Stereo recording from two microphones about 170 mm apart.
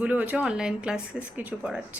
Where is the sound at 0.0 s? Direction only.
10° right (ahead or behind).